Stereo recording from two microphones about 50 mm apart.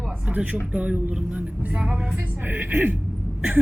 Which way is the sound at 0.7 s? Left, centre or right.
Right.